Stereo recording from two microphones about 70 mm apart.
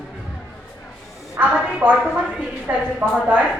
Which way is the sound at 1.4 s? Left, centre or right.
Right.